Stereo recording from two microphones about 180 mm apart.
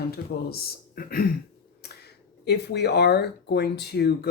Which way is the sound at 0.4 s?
55° left (ahead or behind).